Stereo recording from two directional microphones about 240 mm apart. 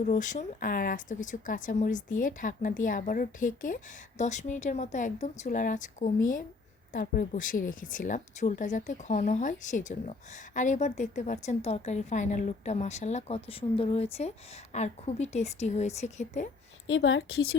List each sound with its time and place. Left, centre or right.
0.0 s a woman's voice: left
16.8 s a woman's voice: left